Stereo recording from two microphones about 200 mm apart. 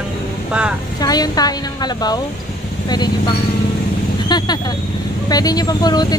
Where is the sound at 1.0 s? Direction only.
20° left (ahead or behind).